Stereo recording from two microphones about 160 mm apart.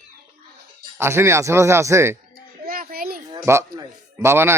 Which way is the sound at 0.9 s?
15° right (ahead or behind).